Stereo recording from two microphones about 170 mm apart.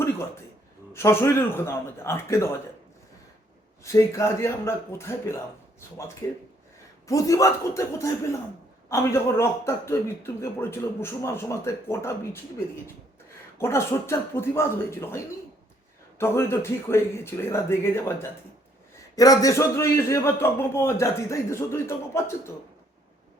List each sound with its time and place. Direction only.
0.9 s a man's voice: 15° left (ahead or behind)
3.8 s a man's voice: 15° left (ahead or behind)